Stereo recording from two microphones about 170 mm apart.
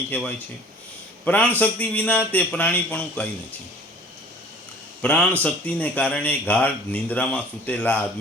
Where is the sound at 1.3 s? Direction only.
10° left (ahead or behind).